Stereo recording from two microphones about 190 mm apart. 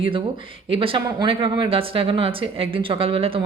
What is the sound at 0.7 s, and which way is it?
Speech, 30° right (ahead or behind).